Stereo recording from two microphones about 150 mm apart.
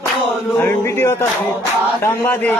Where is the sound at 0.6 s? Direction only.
15° left (ahead or behind).